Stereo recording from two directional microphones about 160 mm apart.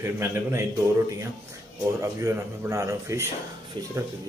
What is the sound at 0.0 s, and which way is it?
Speech, 15° right (ahead or behind).